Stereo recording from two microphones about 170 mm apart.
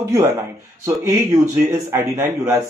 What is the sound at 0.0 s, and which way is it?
Speech, 20° right (ahead or behind).